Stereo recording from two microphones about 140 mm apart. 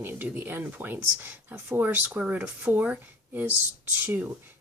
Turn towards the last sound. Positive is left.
turn(degrees=-15)  # may be behind; listen again after turning